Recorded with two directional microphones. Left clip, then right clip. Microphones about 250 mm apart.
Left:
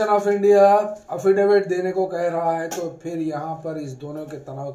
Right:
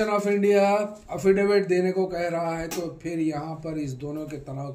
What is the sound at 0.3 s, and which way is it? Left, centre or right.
A man's voice, right.